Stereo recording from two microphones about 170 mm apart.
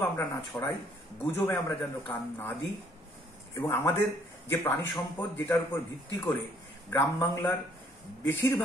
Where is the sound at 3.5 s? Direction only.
15° left (ahead or behind).